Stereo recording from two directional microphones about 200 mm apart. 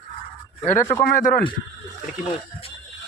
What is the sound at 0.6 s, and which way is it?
Speech, 10° left (ahead or behind).